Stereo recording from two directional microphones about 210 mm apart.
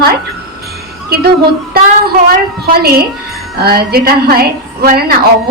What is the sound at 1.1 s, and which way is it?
Speech, 50° right (ahead or behind).